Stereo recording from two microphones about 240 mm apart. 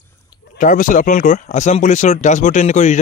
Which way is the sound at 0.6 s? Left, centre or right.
Left.